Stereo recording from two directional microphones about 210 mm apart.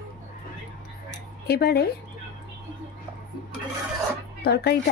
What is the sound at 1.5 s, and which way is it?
Speech, 50° left (ahead or behind).